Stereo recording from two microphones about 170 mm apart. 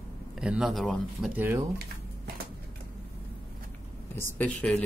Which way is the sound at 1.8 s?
65° right (ahead or behind).